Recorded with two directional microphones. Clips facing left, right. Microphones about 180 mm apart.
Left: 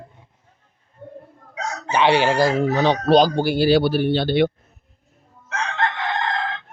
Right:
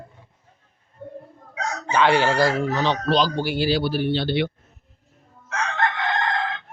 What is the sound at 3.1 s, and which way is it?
Speech, 50° left (ahead or behind).